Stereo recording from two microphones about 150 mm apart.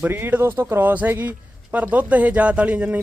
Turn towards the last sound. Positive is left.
turn(degrees=-10)  # may be behind; listen again after turning